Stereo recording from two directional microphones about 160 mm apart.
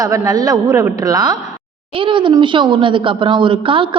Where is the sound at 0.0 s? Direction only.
20° right (ahead or behind).